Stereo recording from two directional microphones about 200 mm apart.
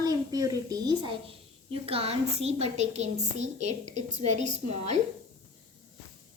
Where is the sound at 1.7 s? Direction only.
30° right (ahead or behind).